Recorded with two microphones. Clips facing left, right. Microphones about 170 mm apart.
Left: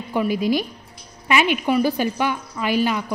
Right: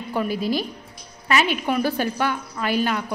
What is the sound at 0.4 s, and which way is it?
Speech, 50° left (ahead or behind).